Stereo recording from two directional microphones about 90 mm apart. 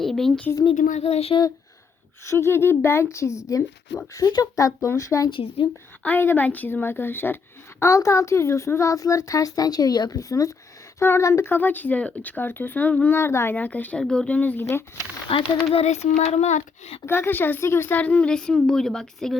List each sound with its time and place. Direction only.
0.0 s speech: 5° left (ahead or behind)
0.6 s speech: 90° left
2.2 s speech: 30° left (ahead or behind)
5.3 s speech: 90° left
6.0 s speech: 20° left (ahead or behind)
11.4 s speech: 20° left (ahead or behind)
14.0 s speech: 10° left (ahead or behind)
14.6 s speech: 30° left (ahead or behind)
15.3 s speech: 90° left
17.1 s speech: 25° left (ahead or behind)
18.0 s speech: 15° left (ahead or behind)